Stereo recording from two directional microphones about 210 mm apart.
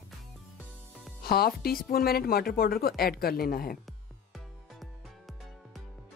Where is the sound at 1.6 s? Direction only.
45° left (ahead or behind).